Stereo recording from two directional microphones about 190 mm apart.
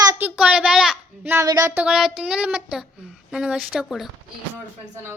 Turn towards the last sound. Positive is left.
turn(degrees=0)  # may be behind; listen again after turning